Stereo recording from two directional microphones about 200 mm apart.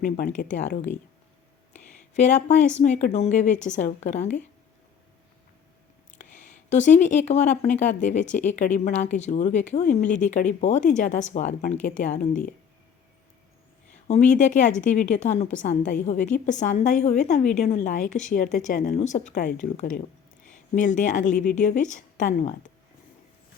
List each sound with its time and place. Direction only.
0.0 s speech: 45° left (ahead or behind)
2.1 s speech: 35° left (ahead or behind)
6.7 s speech: 35° left (ahead or behind)
14.1 s speech: 35° left (ahead or behind)